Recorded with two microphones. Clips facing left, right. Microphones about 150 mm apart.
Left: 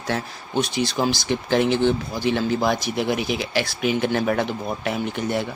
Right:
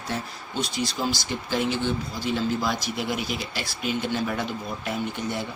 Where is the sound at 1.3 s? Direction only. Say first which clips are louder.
Left 7 dB; 65° left (ahead or behind).